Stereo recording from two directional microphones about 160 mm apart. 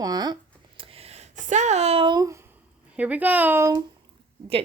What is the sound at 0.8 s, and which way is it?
Speech, 35° right (ahead or behind).